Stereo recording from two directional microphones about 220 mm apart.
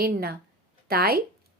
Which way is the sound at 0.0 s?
45° right (ahead or behind).